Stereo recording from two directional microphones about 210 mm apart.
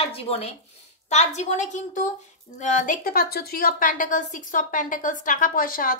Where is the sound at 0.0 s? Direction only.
30° left (ahead or behind).